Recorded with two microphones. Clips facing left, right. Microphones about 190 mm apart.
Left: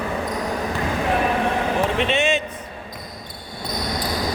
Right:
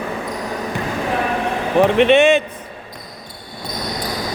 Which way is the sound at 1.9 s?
60° right (ahead or behind).